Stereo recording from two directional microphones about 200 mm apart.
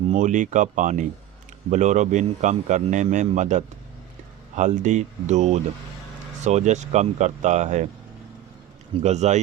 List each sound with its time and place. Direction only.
0.1 s speech: 40° right (ahead or behind)
9.0 s speech: 35° right (ahead or behind)